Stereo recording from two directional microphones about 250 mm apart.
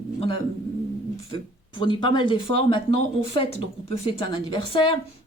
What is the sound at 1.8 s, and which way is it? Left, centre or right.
Speech, centre.